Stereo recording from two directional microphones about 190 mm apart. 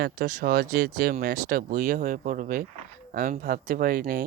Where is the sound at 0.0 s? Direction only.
45° right (ahead or behind).